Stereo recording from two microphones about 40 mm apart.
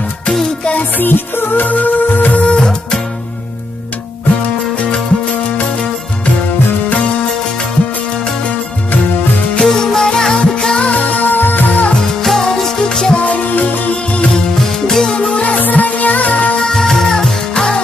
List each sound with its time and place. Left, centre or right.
0.9 s music: left
2.3 s music: left
9.6 s music: centre
10.8 s music: left
12.2 s music: centre
13.2 s music: left
14.9 s music: centre
15.3 s music: left
16.5 s music: centre